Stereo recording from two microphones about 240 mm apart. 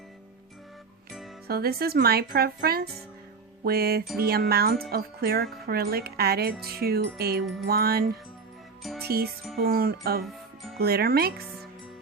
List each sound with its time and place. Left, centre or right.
1.5 s music: right